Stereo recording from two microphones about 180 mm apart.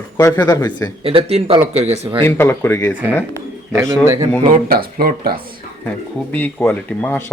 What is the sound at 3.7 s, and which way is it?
Speech, 15° right (ahead or behind).